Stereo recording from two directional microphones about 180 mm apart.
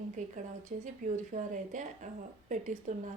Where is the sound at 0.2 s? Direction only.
45° right (ahead or behind).